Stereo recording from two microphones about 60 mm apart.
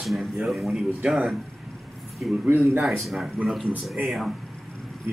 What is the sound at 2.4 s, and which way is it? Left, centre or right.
Speech, right.